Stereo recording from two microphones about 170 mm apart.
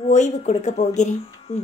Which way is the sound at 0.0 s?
45° left (ahead or behind).